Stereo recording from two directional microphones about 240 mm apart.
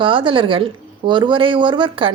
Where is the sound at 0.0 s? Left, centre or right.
Right.